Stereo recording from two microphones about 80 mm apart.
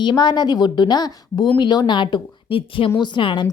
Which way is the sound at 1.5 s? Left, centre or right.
Left.